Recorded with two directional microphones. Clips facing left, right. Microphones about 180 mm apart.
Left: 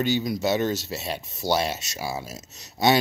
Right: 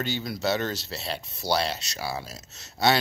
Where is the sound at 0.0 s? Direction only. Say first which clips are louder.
Left 5 dB; 15° left (ahead or behind).